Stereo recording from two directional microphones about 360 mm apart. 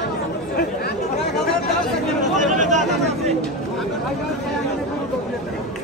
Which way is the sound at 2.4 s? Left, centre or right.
Centre.